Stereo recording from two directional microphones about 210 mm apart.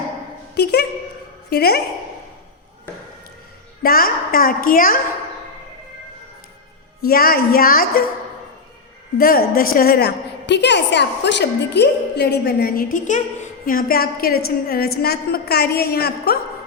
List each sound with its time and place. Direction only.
0.5 s a sound: 50° left (ahead or behind)
1.5 s a woman's voice: 50° left (ahead or behind)
3.8 s a woman's voice: 45° left (ahead or behind)
7.0 s a woman's voice: 45° left (ahead or behind)
9.1 s a woman's voice: 45° left (ahead or behind)